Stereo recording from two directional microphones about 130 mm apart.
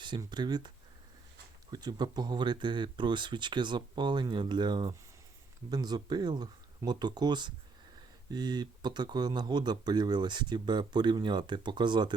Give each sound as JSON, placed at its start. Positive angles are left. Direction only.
{"t": 0.3, "sound": "speech", "side_deg": -35}
{"t": 1.7, "sound": "speech", "side_deg": -30}